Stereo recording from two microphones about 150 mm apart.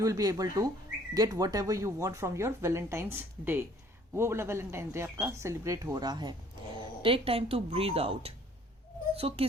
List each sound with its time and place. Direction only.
0.0 s speech: 25° right (ahead or behind)
7.0 s speech: 40° right (ahead or behind)